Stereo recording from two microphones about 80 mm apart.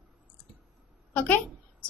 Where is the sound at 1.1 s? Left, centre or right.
Centre.